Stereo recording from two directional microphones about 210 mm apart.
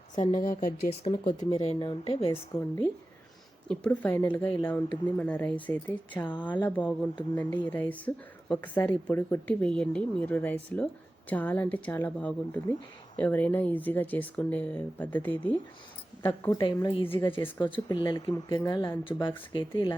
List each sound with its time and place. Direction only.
0.3 s speech: 40° left (ahead or behind)
1.0 s speech: 25° left (ahead or behind)
2.3 s speech: 10° left (ahead or behind)
17.1 s speech: 10° left (ahead or behind)
17.6 s speech: 20° left (ahead or behind)